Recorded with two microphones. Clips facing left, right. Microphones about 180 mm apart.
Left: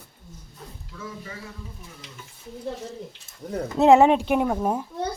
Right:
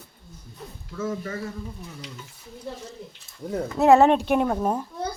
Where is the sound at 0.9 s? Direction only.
45° right (ahead or behind).